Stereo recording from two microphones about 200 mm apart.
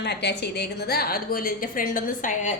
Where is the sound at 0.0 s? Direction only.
55° left (ahead or behind).